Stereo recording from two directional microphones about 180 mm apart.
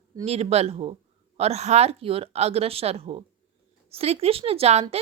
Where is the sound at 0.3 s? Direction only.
35° right (ahead or behind).